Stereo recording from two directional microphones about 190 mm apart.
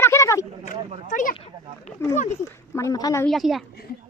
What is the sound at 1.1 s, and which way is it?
Speech, 45° left (ahead or behind).